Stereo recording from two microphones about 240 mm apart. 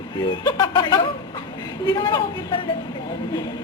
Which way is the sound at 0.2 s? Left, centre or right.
Centre.